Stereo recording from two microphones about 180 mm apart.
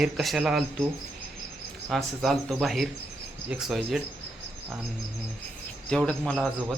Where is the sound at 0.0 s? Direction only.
Centre (ahead or behind).